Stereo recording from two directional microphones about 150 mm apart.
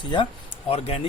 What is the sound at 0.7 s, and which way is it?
Speech, 45° left (ahead or behind).